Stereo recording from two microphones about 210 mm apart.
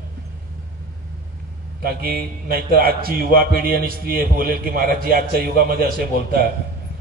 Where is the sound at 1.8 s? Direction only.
45° right (ahead or behind).